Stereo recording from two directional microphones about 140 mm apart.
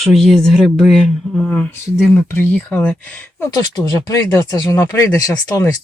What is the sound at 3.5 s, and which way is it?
Speech, 25° left (ahead or behind).